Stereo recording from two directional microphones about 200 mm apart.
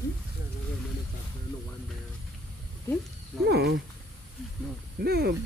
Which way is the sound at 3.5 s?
55° right (ahead or behind).